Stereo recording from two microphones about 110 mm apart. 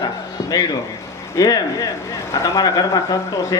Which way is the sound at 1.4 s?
30° left (ahead or behind).